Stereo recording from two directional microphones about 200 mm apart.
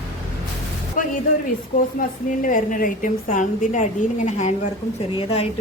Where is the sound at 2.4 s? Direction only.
40° left (ahead or behind).